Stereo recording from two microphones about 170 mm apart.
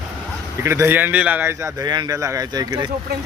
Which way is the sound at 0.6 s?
15° right (ahead or behind).